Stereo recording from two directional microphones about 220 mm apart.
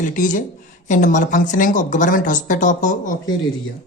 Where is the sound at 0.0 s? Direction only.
35° left (ahead or behind).